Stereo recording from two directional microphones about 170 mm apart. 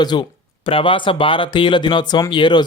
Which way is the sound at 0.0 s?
25° left (ahead or behind).